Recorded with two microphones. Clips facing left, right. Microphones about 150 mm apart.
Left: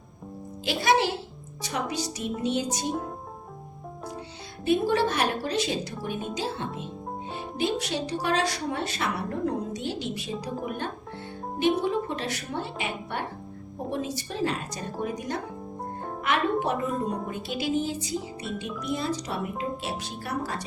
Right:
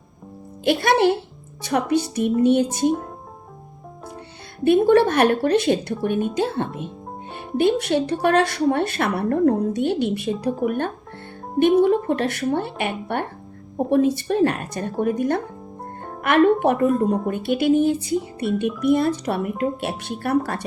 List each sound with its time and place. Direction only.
0.6 s speech: 55° right (ahead or behind)
4.6 s speech: 60° right (ahead or behind)
16.2 s speech: 60° right (ahead or behind)